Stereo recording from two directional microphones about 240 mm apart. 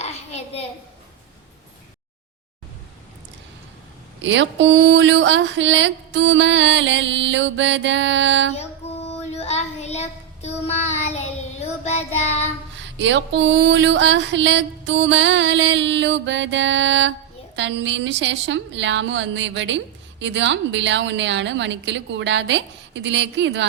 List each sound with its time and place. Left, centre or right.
0.0 s a sound: left
4.2 s a woman's voice: right
9.1 s child singing: left
12.7 s a woman's voice: right